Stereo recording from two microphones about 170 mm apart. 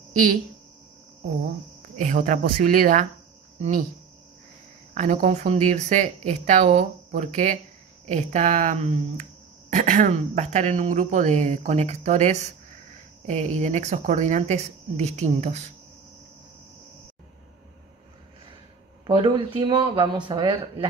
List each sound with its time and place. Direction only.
2.0 s speech: 50° right (ahead or behind)
4.9 s speech: 45° right (ahead or behind)
19.0 s speech: 25° right (ahead or behind)